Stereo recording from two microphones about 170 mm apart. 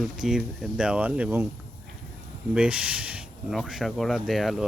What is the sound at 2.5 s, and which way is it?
Speech, 5° right (ahead or behind).